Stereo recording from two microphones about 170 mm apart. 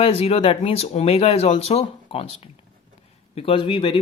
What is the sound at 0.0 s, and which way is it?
Speech, 35° left (ahead or behind).